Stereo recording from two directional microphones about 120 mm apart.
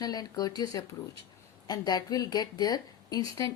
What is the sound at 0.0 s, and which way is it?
A woman's voice, 35° left (ahead or behind).